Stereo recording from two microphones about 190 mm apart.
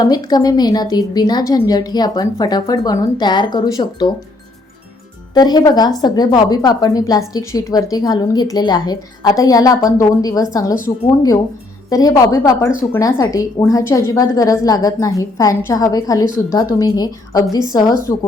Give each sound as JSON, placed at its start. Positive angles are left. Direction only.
{"t": 0.0, "sound": "a woman's voice", "side_deg": 20}
{"t": 5.3, "sound": "a woman's voice", "side_deg": 20}
{"t": 11.9, "sound": "a woman's voice", "side_deg": 20}